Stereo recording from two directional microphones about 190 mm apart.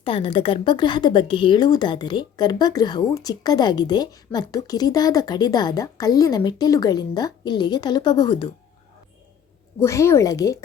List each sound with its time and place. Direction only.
0.0 s speech: 25° left (ahead or behind)
9.8 s a woman's voice: 15° left (ahead or behind)